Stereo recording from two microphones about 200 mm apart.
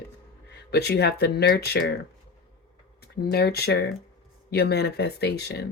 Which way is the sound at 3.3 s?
55° left (ahead or behind).